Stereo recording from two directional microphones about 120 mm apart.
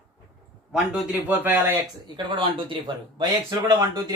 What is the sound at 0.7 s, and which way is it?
Speech, 5° right (ahead or behind).